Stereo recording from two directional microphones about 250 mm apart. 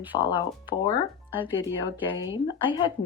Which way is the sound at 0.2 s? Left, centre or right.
Centre.